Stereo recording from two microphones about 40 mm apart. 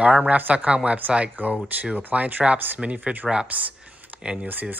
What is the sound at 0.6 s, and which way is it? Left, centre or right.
Speech, right.